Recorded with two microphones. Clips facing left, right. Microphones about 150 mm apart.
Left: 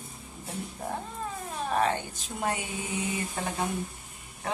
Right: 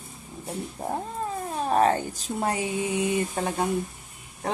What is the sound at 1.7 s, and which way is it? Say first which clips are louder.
Speech: right 6 dB; 40° right (ahead or behind).